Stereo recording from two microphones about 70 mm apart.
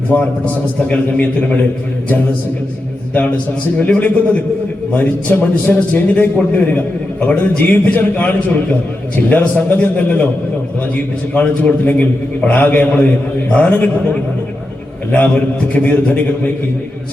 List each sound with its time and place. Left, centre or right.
0.1 s a man's voice: left
3.8 s a man's voice: left
11.3 s a man's voice: left
15.7 s a man's voice: left